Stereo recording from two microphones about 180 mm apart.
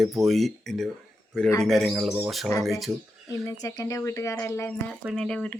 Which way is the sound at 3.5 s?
20° left (ahead or behind).